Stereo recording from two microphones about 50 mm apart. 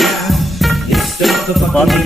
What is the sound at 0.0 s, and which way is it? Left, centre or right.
Music, centre.